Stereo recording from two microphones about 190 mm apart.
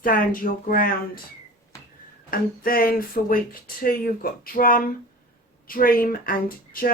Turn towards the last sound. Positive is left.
turn(degrees=50)  # may be behind; listen again after turning